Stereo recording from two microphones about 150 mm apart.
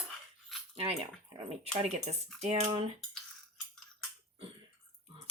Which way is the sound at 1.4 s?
45° right (ahead or behind).